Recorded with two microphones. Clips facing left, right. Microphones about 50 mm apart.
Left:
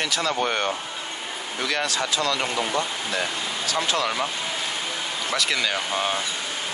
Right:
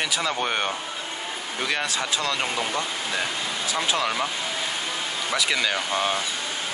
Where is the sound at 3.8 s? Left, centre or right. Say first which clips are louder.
Even; centre.